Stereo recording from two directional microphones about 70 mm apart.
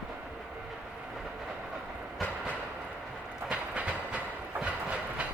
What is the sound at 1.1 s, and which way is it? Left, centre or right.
Train, centre.